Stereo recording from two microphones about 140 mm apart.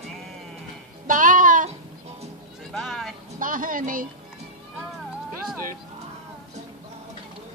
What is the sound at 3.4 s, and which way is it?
Speech, 75° right (ahead or behind).